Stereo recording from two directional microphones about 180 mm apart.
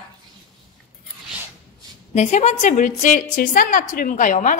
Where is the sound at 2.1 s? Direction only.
40° left (ahead or behind).